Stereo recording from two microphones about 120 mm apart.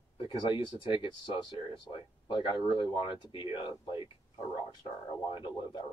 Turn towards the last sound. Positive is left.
turn(degrees=40)  # may be behind; listen again after turning